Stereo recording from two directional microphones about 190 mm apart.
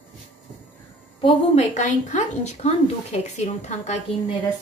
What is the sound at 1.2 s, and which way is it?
A woman's voice, 35° left (ahead or behind).